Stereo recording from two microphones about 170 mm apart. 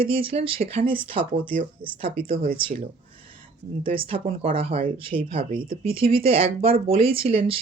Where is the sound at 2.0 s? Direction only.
60° right (ahead or behind).